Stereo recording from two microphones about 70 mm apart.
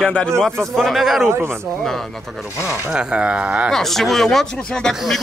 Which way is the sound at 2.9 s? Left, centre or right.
Centre.